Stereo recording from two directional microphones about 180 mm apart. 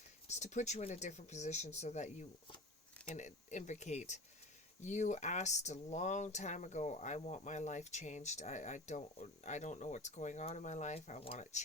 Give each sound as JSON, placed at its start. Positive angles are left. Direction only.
{"t": 0.3, "sound": "speech", "side_deg": 40}